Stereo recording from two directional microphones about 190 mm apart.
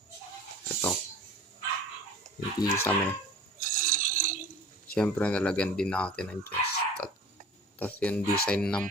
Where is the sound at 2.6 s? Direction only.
20° left (ahead or behind).